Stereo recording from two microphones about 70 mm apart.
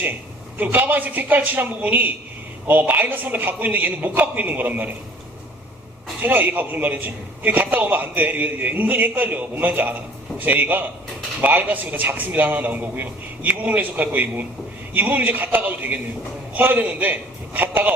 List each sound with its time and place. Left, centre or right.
0.6 s a man's voice: right
6.2 s a man's voice: right